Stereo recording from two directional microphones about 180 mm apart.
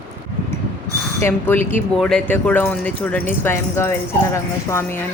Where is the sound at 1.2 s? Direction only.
10° left (ahead or behind).